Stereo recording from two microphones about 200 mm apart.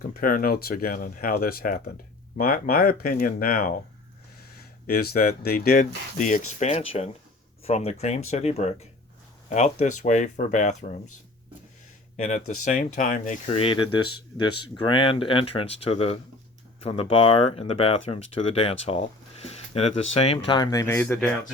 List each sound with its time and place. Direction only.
0.1 s speech: 45° left (ahead or behind)
4.9 s speech: 50° left (ahead or behind)
12.1 s speech: 35° left (ahead or behind); by 21.2 s 10° left (ahead or behind)